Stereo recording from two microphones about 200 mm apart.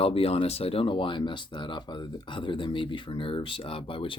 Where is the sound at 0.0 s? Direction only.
30° left (ahead or behind).